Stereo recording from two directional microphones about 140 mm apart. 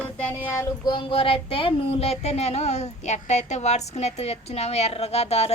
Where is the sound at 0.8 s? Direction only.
35° left (ahead or behind).